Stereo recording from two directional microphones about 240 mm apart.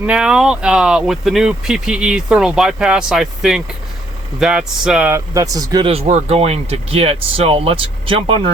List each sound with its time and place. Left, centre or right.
0.0 s speech: centre; by 8.5 s right